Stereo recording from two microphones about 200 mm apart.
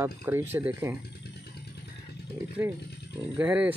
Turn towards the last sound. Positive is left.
turn(degrees=-5)  # may be behind; listen again after turning